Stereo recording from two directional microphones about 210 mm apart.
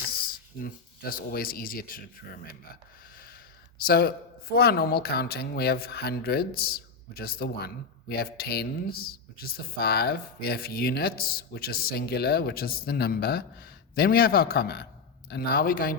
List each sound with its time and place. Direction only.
0.6 s a woman's voice: 45° left (ahead or behind)
3.8 s a woman's voice: 45° left (ahead or behind)